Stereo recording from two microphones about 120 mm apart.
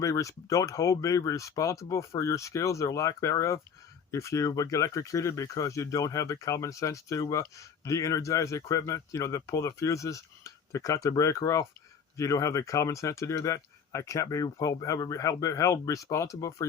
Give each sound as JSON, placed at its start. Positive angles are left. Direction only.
{"t": 0.0, "sound": "speech", "side_deg": 25}